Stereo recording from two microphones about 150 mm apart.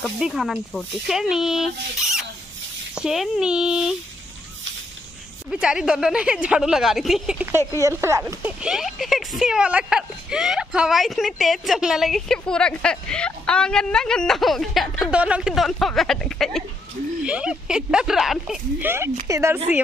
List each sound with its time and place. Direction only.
0.0 s speech: centre (ahead or behind)
5.5 s speech: 5° right (ahead or behind)
7.5 s speech: 20° right (ahead or behind); by 16.6 s 5° left (ahead or behind)
17.2 s speech: 5° right (ahead or behind)
18.8 s speech: 15° right (ahead or behind)